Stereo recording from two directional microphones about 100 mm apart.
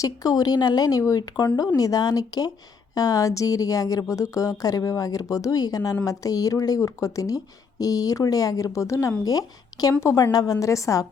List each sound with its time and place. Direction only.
0.0 s speech: 40° left (ahead or behind)
10.0 s a woman's voice: 25° left (ahead or behind)
10.3 s speech: 40° left (ahead or behind)